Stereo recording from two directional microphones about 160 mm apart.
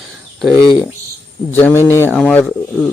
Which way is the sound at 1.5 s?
15° left (ahead or behind).